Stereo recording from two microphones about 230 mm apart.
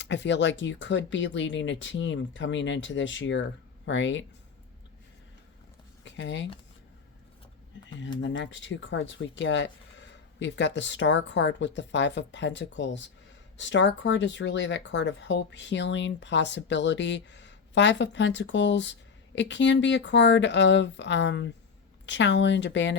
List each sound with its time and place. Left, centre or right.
0.0 s speech: left
6.1 s speech: left
8.2 s speech: left